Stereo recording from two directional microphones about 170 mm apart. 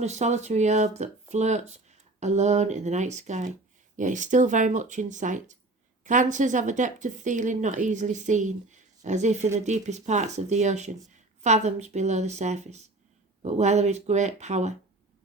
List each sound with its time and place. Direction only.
0.0 s a woman's voice: 40° right (ahead or behind)